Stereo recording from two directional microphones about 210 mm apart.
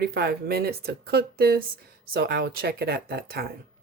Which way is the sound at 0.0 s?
50° right (ahead or behind).